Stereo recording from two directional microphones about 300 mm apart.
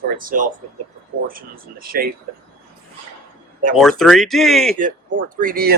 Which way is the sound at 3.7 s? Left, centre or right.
Centre.